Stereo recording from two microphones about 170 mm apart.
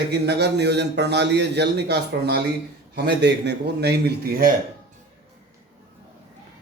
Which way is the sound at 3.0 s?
90° right.